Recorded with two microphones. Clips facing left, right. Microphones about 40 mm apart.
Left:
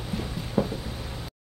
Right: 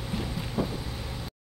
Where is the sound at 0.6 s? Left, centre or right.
Centre.